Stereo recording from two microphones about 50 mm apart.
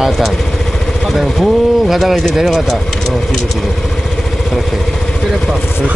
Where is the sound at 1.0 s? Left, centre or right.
Centre.